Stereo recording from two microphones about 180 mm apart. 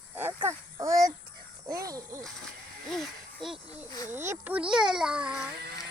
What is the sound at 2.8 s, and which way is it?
Speech, centre (ahead or behind).